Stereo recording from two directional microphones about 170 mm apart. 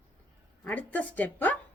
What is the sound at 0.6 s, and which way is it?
Speech, 10° left (ahead or behind).